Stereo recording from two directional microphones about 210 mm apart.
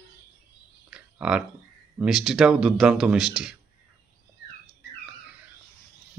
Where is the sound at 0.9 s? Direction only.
5° right (ahead or behind).